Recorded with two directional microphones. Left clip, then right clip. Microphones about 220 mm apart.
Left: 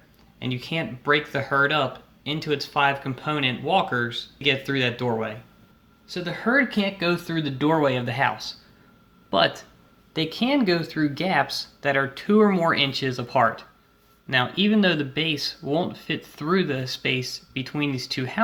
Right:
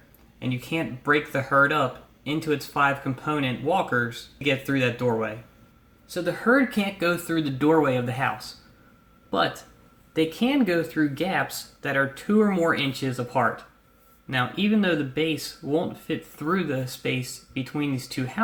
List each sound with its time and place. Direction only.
0.3 s speech: 35° left (ahead or behind)
10.2 s speech: 40° left (ahead or behind)